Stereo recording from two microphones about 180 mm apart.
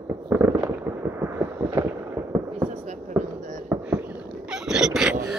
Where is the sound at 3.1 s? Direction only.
5° right (ahead or behind).